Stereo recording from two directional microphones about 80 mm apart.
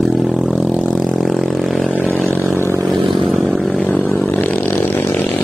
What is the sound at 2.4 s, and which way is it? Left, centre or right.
Vehicle, left.